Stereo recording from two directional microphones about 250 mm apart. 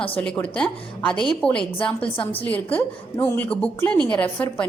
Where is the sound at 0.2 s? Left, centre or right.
Centre.